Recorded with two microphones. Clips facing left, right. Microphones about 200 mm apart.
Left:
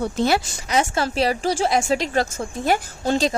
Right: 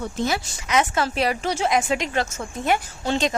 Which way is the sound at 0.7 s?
35° left (ahead or behind).